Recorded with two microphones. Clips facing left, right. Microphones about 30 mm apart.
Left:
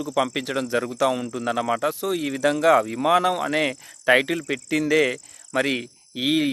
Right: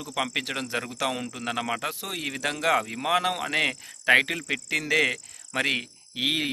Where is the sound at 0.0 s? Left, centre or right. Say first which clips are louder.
Left 5 dB; centre.